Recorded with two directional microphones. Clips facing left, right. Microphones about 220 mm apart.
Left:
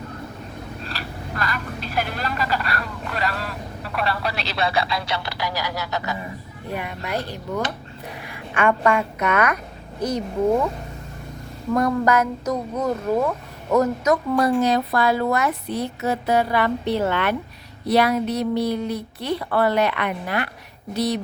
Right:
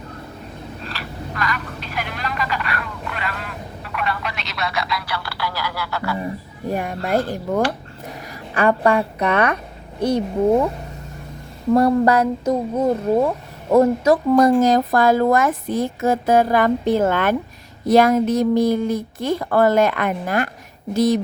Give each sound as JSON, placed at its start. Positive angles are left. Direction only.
{"t": 0.9, "sound": "vehicle", "side_deg": 40}
{"t": 6.7, "sound": "speech", "side_deg": -45}
{"t": 8.3, "sound": "a woman's voice", "side_deg": -35}
{"t": 11.7, "sound": "speech", "side_deg": -30}
{"t": 14.3, "sound": "speech", "side_deg": -45}